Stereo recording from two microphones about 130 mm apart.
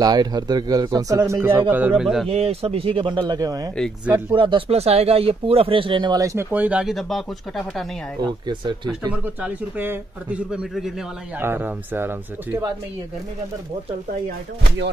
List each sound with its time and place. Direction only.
0.0 s a man's voice: 30° right (ahead or behind); by 2.0 s 15° right (ahead or behind)
2.2 s speech: 50° right (ahead or behind); by 3.7 s 30° right (ahead or behind)
4.0 s a man's voice: 15° right (ahead or behind)
4.4 s speech: 40° right (ahead or behind)
6.5 s speech: 10° right (ahead or behind)
8.2 s speech: 35° right (ahead or behind)
9.1 s a man's voice: 10° right (ahead or behind)
11.3 s a man's voice: 15° right (ahead or behind)